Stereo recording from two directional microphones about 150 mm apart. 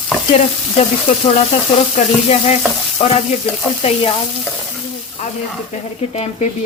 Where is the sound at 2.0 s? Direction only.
55° left (ahead or behind).